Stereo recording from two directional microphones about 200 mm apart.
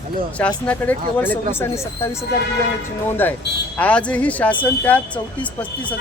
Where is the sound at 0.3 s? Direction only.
5° left (ahead or behind).